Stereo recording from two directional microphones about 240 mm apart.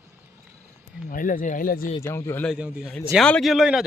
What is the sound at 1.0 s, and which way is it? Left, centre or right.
Speech, left.